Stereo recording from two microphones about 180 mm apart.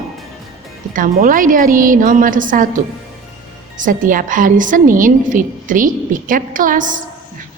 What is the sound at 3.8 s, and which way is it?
A woman's voice, 50° right (ahead or behind).